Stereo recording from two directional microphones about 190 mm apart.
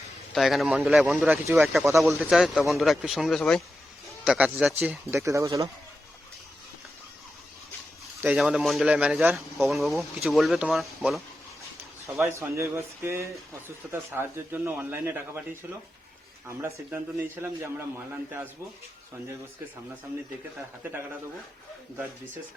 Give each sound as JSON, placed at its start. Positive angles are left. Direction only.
{"t": 0.3, "sound": "speech", "side_deg": 0}
{"t": 8.2, "sound": "speech", "side_deg": -5}
{"t": 12.0, "sound": "speech", "side_deg": -15}
{"t": 16.5, "sound": "speech", "side_deg": -15}